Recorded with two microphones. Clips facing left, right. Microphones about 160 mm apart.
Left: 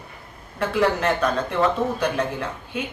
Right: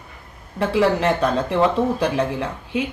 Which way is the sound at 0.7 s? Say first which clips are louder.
Right 3 dB; 25° right (ahead or behind).